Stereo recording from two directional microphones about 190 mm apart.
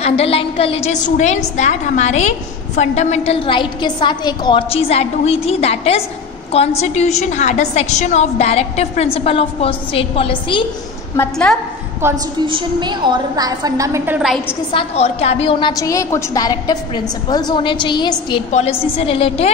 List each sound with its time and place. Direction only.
0.0 s a woman's voice: 30° left (ahead or behind)
11.1 s a woman's voice: 5° left (ahead or behind)
12.0 s a woman's voice: 15° right (ahead or behind)
12.4 s a woman's voice: 25° right (ahead or behind); by 14.4 s 5° right (ahead or behind)
14.7 s a woman's voice: 30° left (ahead or behind)
15.7 s a woman's voice: 15° left (ahead or behind)
18.5 s a woman's voice: 35° left (ahead or behind)